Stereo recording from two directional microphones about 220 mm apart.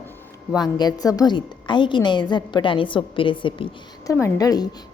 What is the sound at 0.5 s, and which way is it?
A woman's voice, 20° left (ahead or behind).